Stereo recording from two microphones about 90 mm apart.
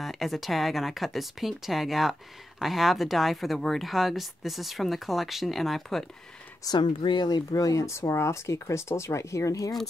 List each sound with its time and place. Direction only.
0.0 s speech: centre (ahead or behind)
6.6 s speech: 55° left (ahead or behind)
7.2 s speech: 45° left (ahead or behind)